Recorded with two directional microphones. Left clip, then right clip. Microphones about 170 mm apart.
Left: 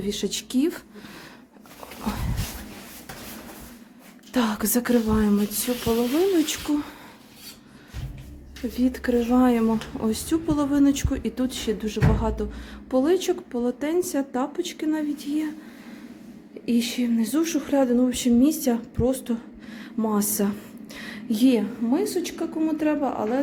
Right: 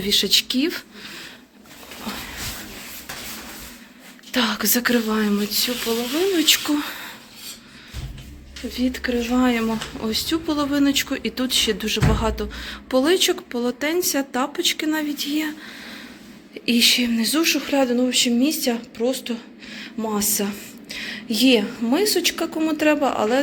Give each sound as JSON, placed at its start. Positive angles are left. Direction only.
{"t": 0.0, "sound": "speech", "side_deg": 15}
{"t": 4.3, "sound": "a woman's voice", "side_deg": 25}
{"t": 8.7, "sound": "a woman's voice", "side_deg": 40}
{"t": 16.6, "sound": "speech", "side_deg": 10}
{"t": 21.8, "sound": "speech", "side_deg": 5}